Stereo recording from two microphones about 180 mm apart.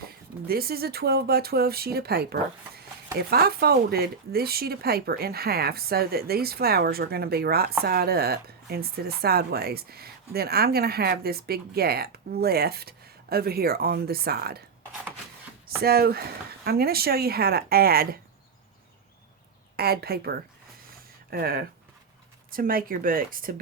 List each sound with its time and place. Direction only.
0.4 s speech: 60° right (ahead or behind)
15.8 s speech: 60° right (ahead or behind)
19.7 s speech: 60° right (ahead or behind)